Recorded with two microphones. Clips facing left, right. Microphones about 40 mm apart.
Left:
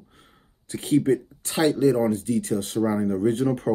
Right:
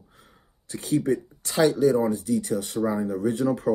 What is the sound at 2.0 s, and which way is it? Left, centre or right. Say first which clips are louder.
Speech: left 1 dB; left.